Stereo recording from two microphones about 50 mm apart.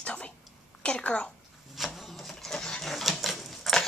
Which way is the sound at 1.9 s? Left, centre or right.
Centre.